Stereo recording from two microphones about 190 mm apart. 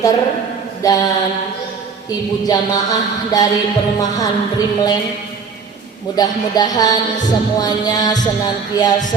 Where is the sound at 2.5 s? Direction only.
20° left (ahead or behind).